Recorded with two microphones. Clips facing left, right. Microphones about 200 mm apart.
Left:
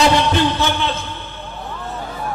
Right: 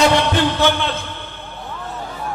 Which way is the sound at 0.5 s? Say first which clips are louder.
Right 2 dB; 60° right (ahead or behind).